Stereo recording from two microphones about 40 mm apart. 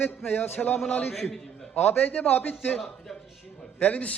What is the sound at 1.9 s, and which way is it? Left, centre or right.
Speech, left.